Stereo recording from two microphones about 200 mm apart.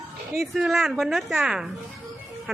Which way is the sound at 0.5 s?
Centre (ahead or behind).